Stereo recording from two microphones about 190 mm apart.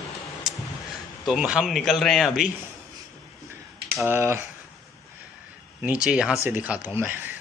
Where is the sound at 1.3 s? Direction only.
5° right (ahead or behind).